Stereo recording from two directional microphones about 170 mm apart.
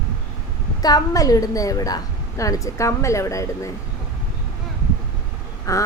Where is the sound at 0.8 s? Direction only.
20° left (ahead or behind).